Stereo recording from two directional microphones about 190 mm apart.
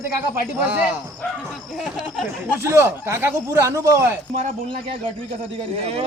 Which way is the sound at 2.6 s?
15° right (ahead or behind).